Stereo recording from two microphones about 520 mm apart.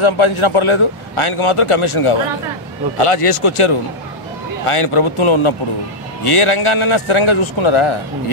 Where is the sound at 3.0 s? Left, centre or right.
Left.